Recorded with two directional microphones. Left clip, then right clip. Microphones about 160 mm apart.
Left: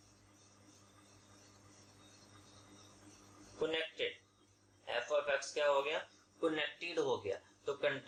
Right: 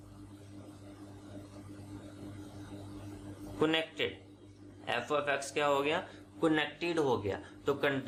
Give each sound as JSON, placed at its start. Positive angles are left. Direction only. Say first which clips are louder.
{"t": 3.6, "sound": "a man's voice", "louder": "right 6 dB", "side_deg": -25}